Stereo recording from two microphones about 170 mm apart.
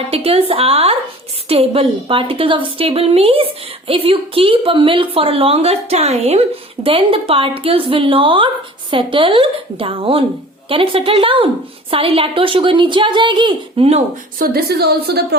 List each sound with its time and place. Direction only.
0.1 s a woman's voice: 35° right (ahead or behind)
14.3 s a woman's voice: 60° right (ahead or behind)